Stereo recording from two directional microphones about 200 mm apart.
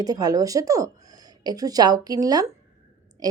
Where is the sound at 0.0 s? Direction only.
20° right (ahead or behind).